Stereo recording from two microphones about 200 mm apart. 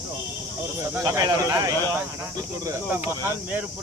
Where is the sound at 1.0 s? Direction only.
15° right (ahead or behind).